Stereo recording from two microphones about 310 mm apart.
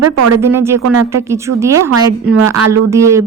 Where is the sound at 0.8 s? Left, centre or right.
Right.